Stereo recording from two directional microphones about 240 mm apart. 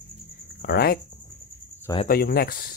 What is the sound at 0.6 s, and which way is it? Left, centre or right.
Speech, left.